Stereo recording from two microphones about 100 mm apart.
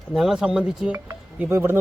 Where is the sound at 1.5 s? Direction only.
25° right (ahead or behind).